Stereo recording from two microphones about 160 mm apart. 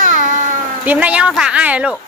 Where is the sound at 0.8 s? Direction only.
10° right (ahead or behind).